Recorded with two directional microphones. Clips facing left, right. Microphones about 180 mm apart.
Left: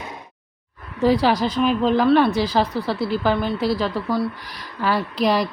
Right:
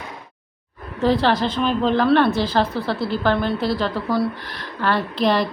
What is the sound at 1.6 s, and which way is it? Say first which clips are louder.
Speech: left 1 dB; 5° left (ahead or behind).